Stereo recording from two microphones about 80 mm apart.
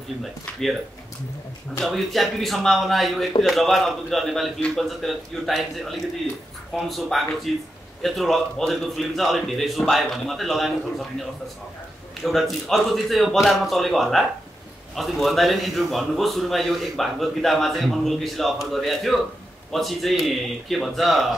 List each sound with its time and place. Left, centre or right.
0.2 s a man's voice: centre
1.8 s a man's voice: centre
12.2 s a man's voice: centre